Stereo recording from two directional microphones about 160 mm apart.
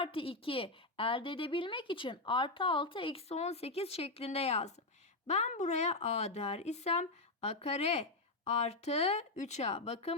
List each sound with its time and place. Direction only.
0.0 s a woman's voice: 35° left (ahead or behind)